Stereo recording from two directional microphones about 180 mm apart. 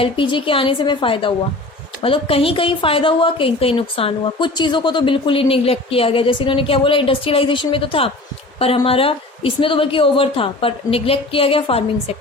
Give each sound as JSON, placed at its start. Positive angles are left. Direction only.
{"t": 0.0, "sound": "a woman's voice", "side_deg": 30}